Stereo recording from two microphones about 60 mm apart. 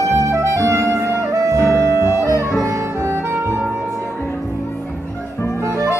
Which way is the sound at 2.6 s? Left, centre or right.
Right.